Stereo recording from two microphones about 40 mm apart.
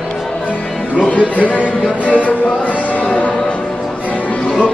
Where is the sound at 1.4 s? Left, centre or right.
Left.